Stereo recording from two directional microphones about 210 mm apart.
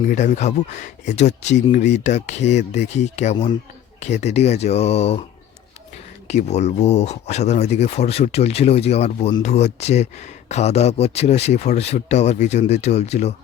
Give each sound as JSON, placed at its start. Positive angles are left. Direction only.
{"t": 0.1, "sound": "speech", "side_deg": 35}
{"t": 6.2, "sound": "speech", "side_deg": 30}